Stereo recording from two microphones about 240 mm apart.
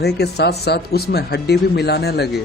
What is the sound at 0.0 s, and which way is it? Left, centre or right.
Speech, left.